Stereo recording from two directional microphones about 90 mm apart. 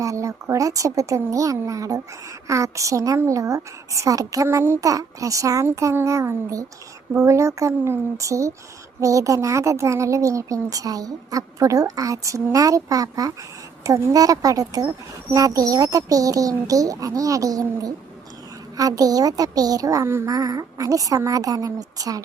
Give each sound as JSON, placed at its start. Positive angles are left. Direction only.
{"t": 0.0, "sound": "speech", "side_deg": -35}
{"t": 4.4, "sound": "a child's voice", "side_deg": -25}
{"t": 4.8, "sound": "speech", "side_deg": -40}
{"t": 20.1, "sound": "a child's voice", "side_deg": -25}
{"t": 20.3, "sound": "speech", "side_deg": -40}